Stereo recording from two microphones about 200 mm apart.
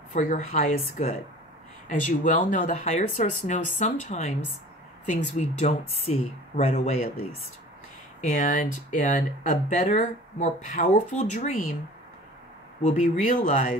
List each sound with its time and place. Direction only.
0.1 s speech: 35° left (ahead or behind)
12.8 s speech: 40° left (ahead or behind)